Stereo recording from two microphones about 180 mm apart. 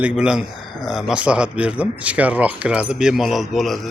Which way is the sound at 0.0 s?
5° right (ahead or behind).